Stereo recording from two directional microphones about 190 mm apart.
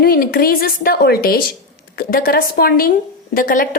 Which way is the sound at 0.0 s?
50° left (ahead or behind).